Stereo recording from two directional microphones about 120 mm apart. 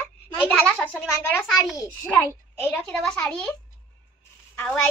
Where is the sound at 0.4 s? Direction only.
10° left (ahead or behind).